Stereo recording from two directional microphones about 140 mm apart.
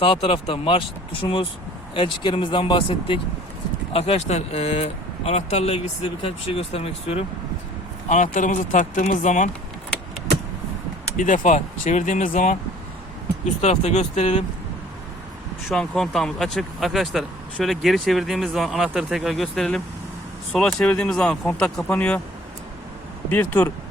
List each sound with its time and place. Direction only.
0.0 s speech: 40° left (ahead or behind)
8.1 s speech: 65° left (ahead or behind)
11.2 s speech: 65° left (ahead or behind)
13.6 s speech: 50° left (ahead or behind)
15.7 s speech: 5° left (ahead or behind)
23.3 s speech: 10° left (ahead or behind)